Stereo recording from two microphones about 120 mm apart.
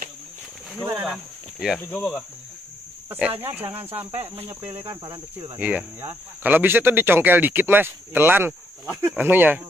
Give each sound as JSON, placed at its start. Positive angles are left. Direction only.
{"t": 1.0, "sound": "speech", "side_deg": -5}
{"t": 1.8, "sound": "cricket", "side_deg": 15}
{"t": 3.1, "sound": "speech", "side_deg": -15}